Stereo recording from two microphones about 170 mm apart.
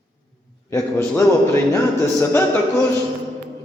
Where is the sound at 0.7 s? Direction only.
15° left (ahead or behind).